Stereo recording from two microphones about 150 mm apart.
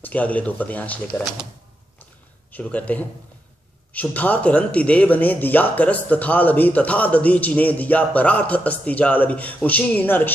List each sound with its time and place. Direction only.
0.0 s speech: 10° left (ahead or behind)
2.5 s speech: 10° left (ahead or behind)